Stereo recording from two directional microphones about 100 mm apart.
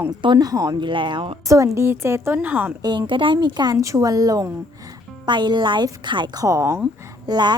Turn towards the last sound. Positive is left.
turn(degrees=-50)  # may be behind; listen again after turning